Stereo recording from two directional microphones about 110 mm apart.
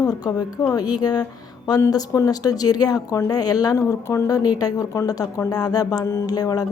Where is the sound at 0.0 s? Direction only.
35° left (ahead or behind).